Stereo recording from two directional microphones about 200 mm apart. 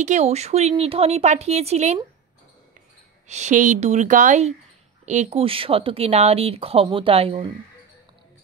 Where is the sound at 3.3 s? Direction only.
35° right (ahead or behind).